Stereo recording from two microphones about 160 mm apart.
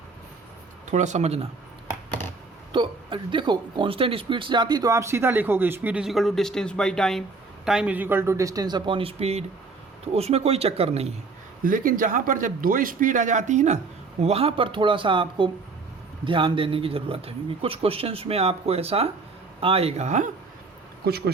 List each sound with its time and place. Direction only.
0.9 s speech: 45° right (ahead or behind)
2.7 s a man's voice: 30° right (ahead or behind)
11.6 s a man's voice: 60° right (ahead or behind)
21.0 s speech: 80° right